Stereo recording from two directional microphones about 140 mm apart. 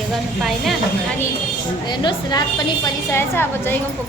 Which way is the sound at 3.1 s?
15° left (ahead or behind).